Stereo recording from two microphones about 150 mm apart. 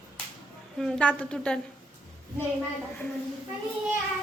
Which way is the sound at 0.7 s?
Centre (ahead or behind).